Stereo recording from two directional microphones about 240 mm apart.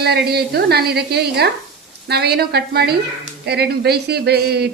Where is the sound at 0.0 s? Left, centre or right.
Right.